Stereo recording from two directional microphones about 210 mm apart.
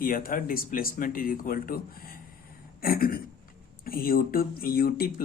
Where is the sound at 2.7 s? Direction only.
45° left (ahead or behind).